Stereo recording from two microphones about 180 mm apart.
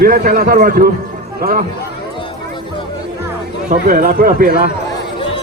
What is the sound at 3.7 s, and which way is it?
Speech, 50° right (ahead or behind).